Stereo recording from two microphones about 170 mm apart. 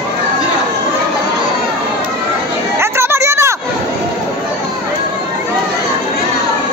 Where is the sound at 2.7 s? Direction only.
15° right (ahead or behind).